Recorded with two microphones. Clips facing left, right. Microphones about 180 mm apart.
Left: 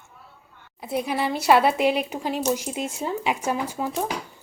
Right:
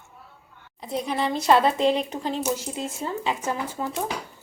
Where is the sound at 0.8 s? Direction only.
10° left (ahead or behind).